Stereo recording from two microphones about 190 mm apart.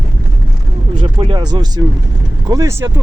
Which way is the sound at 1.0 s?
25° right (ahead or behind).